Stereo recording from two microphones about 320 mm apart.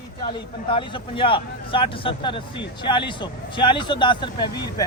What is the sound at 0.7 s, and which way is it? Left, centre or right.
Speech, centre.